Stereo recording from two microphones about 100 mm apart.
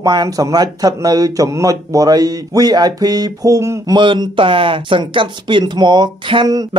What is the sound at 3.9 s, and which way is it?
Speech, 50° right (ahead or behind).